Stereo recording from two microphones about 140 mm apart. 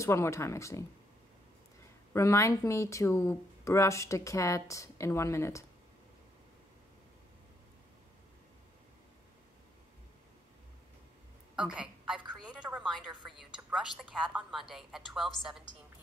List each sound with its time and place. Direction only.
0.0 s speech: 20° left (ahead or behind)
2.1 s speech: 20° left (ahead or behind)
11.5 s a sound: 5° right (ahead or behind)
12.4 s music: 10° right (ahead or behind)
13.6 s a woman's voice: 10° right (ahead or behind)